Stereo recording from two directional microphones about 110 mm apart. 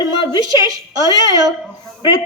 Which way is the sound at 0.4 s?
35° right (ahead or behind).